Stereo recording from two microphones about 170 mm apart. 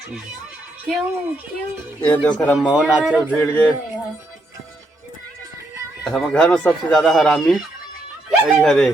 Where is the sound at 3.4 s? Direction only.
10° left (ahead or behind).